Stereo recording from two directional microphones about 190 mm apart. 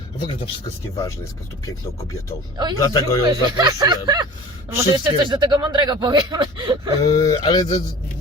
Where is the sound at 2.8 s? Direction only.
20° left (ahead or behind).